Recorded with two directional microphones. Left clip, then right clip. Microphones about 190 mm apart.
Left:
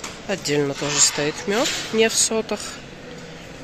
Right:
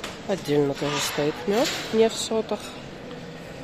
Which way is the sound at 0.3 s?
10° right (ahead or behind).